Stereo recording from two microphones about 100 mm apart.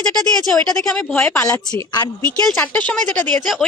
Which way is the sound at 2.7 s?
15° left (ahead or behind).